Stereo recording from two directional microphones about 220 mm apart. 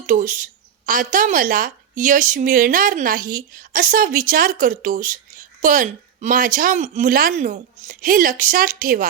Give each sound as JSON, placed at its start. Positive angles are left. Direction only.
{"t": 0.0, "sound": "a woman's voice", "side_deg": -35}